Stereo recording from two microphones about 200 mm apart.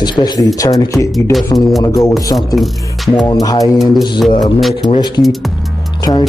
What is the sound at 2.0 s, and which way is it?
Music, 15° left (ahead or behind).